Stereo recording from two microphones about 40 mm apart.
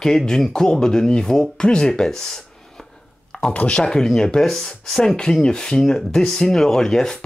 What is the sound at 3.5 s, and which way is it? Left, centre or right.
Speech, left.